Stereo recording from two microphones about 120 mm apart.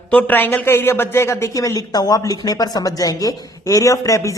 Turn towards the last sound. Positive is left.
turn(degrees=25)  # may be behind; listen again after turning